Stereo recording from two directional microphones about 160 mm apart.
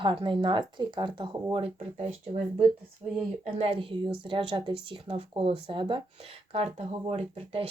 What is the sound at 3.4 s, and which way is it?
Speech, 40° right (ahead or behind).